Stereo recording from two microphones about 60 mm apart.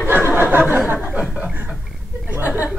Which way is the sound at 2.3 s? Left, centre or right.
Right.